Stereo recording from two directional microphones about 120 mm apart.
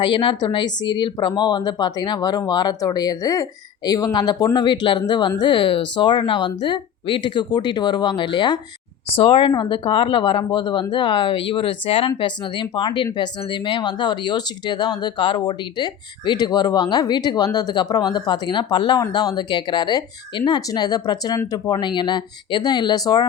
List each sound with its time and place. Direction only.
0.0 s speech: 45° left (ahead or behind)